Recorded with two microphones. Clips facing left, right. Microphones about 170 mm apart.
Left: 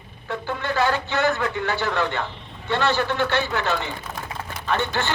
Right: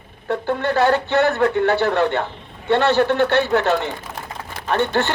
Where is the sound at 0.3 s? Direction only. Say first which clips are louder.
Right 7 dB; 60° right (ahead or behind).